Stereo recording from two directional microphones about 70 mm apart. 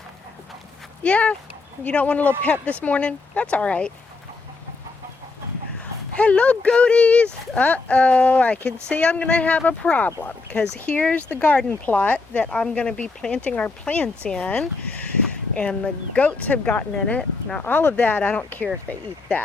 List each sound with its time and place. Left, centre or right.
1.0 s speech: centre
6.1 s speech: centre